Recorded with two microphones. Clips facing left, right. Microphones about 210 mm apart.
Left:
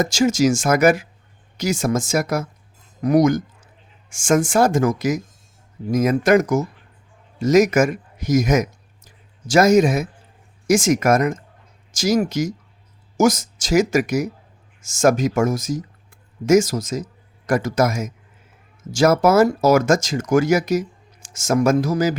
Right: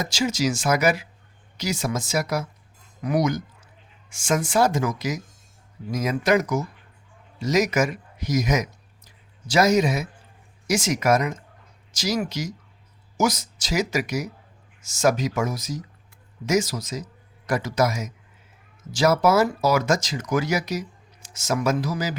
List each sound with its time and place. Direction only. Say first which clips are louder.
0.0 s speech: left 7 dB; 45° left (ahead or behind)